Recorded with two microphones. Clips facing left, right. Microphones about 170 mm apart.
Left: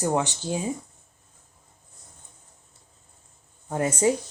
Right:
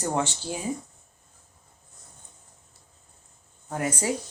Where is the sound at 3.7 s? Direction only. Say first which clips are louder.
Left 4 dB; 25° left (ahead or behind).